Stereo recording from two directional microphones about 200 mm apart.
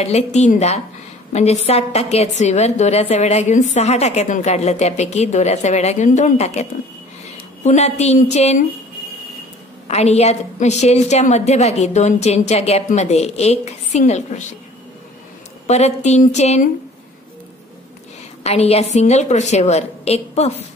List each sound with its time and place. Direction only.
0.0 s a woman's voice: 35° left (ahead or behind)
9.8 s a woman's voice: 30° left (ahead or behind)
15.6 s a woman's voice: 35° left (ahead or behind)
18.4 s a woman's voice: 30° left (ahead or behind)